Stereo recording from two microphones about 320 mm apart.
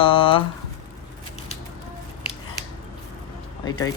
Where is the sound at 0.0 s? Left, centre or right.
Centre.